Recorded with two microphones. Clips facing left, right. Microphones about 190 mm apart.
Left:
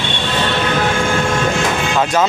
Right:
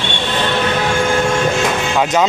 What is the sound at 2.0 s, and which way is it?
Speech, 15° right (ahead or behind).